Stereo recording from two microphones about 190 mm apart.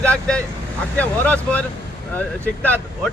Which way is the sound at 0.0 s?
5° left (ahead or behind).